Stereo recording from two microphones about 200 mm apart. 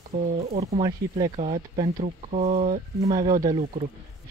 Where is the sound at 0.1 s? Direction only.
35° right (ahead or behind).